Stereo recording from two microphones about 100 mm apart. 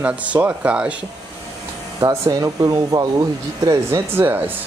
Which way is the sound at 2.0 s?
35° right (ahead or behind).